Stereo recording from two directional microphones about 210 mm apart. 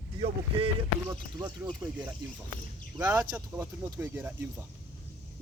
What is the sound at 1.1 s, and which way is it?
Speech, 15° right (ahead or behind).